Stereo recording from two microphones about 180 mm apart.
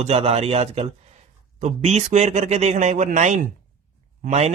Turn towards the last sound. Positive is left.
turn(degrees=-40)  # may be behind; listen again after turning